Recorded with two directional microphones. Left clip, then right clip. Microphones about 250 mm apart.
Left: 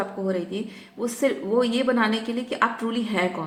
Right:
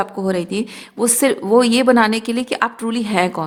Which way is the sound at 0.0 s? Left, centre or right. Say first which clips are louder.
Right 7 dB; right.